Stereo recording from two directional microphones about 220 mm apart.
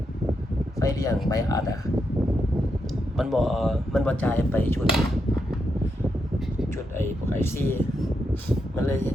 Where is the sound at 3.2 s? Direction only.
Centre (ahead or behind).